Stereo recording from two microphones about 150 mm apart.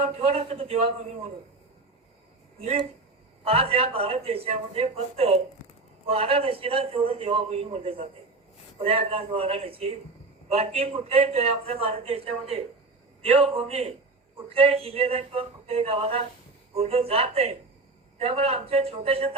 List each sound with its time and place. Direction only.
0.0 s a man's voice: 45° right (ahead or behind)
2.6 s a man's voice: 45° right (ahead or behind)